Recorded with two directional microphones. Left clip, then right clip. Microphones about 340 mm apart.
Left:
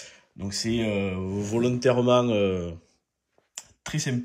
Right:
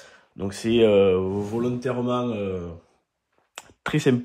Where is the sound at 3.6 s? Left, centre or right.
Centre.